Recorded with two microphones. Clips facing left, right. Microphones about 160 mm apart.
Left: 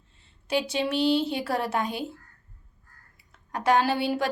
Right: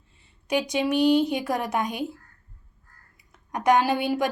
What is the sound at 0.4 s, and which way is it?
A woman's voice, 15° right (ahead or behind).